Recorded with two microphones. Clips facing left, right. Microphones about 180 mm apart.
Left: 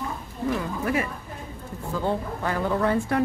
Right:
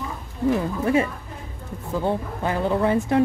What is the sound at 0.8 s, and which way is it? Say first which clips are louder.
A woman's voice: right 5 dB; 25° right (ahead or behind).